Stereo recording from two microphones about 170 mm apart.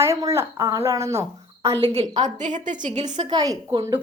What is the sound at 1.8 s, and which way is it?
A woman's voice, 35° right (ahead or behind).